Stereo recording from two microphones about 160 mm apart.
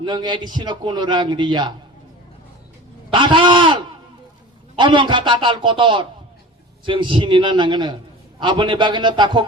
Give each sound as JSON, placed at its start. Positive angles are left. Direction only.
{"t": 0.0, "sound": "a man's voice", "side_deg": -30}
{"t": 3.1, "sound": "a sound", "side_deg": -30}
{"t": 4.8, "sound": "a man's voice", "side_deg": -30}